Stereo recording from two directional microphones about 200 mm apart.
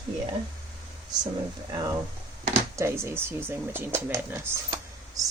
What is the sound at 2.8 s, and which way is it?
Speech, 10° right (ahead or behind).